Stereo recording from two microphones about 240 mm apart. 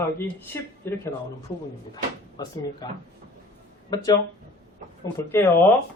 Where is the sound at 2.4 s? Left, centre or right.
Centre.